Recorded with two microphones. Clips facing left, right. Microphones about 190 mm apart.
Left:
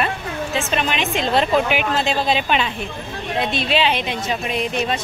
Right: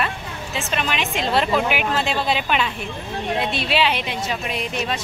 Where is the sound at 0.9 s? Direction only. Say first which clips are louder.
Left 2 dB; 30° left (ahead or behind).